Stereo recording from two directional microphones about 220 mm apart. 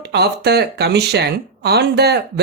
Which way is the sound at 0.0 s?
50° right (ahead or behind).